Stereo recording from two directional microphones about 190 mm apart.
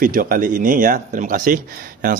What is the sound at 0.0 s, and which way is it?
Speech, 45° right (ahead or behind).